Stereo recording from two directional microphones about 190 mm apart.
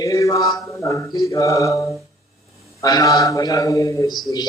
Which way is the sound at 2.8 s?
20° left (ahead or behind).